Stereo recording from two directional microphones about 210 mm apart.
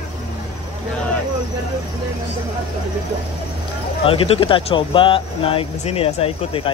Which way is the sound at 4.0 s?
25° left (ahead or behind).